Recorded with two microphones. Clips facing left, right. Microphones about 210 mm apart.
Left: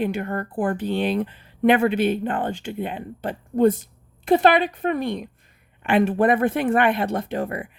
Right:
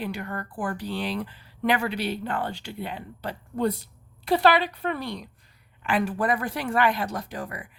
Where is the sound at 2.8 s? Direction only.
20° left (ahead or behind).